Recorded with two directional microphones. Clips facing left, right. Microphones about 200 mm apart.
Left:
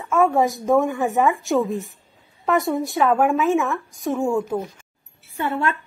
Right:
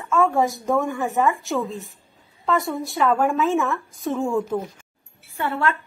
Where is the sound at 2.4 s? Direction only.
20° left (ahead or behind).